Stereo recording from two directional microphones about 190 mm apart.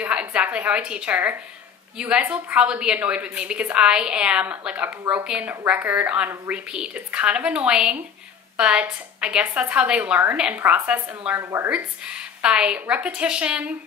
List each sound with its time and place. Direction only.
0.0 s a woman's voice: 5° right (ahead or behind)